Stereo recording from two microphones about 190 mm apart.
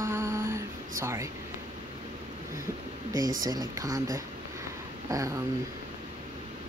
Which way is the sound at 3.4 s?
20° right (ahead or behind).